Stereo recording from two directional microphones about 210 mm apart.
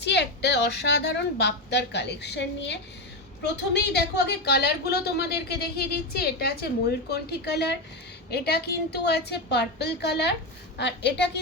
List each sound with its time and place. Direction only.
0.0 s a woman's voice: 55° left (ahead or behind)